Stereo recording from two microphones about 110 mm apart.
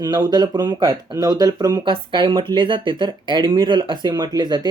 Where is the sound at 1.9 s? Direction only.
45° right (ahead or behind).